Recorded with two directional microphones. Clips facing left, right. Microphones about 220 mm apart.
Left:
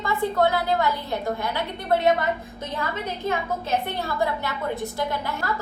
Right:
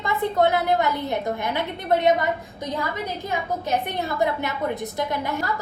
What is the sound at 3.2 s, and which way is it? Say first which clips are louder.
A woman's voice: left 2 dB; 15° right (ahead or behind).